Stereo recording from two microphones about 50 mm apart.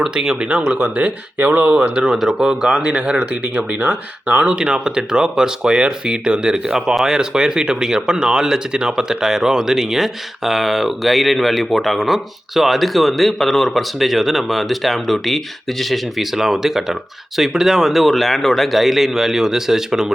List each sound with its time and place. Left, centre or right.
0.1 s speech: centre
0.9 s speech: right
2.0 s speech: centre
2.5 s speech: centre
3.6 s speech: right; by 20.1 s centre